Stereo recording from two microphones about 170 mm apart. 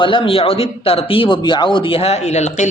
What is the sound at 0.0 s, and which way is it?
A man's voice, 30° left (ahead or behind).